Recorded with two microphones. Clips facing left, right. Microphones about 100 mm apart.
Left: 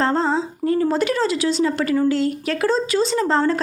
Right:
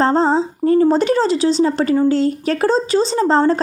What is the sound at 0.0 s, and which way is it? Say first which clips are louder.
A woman's voice: right 5 dB; 35° right (ahead or behind).